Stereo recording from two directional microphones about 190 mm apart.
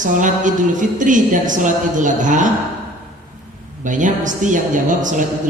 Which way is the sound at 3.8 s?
40° right (ahead or behind).